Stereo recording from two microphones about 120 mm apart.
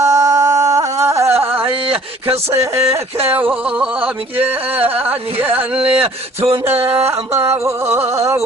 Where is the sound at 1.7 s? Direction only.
50° right (ahead or behind).